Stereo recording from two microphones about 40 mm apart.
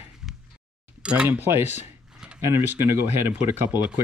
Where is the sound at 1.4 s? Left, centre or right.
Right.